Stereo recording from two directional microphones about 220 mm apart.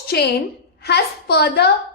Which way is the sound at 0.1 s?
45° left (ahead or behind).